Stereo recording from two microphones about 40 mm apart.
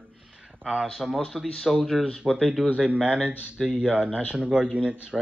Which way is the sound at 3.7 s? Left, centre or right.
Right.